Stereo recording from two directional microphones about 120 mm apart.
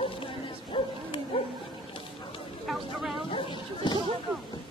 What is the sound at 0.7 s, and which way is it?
Bow-wow, 45° left (ahead or behind).